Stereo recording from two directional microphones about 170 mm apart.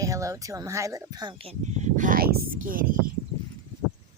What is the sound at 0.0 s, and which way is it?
Speech, 20° right (ahead or behind).